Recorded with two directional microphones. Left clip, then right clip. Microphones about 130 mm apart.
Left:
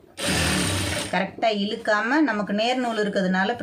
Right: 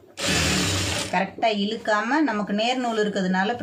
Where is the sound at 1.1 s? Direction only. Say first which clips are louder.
Even; 30° left (ahead or behind).